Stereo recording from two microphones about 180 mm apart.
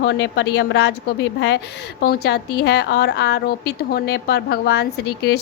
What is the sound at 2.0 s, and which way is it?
A woman's voice, 60° left (ahead or behind).